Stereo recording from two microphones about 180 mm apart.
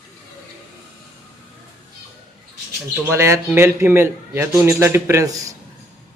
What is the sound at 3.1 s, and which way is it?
A man's voice, 15° right (ahead or behind).